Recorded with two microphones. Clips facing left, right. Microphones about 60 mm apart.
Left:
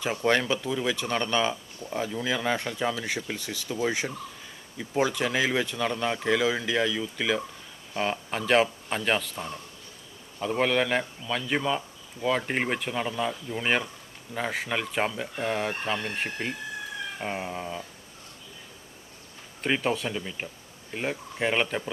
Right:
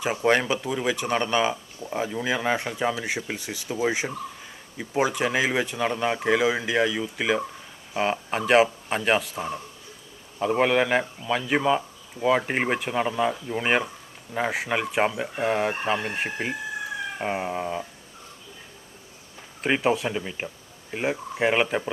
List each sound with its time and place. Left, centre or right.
0.0 s a man's voice: centre
17.1 s cat: centre
19.6 s a man's voice: centre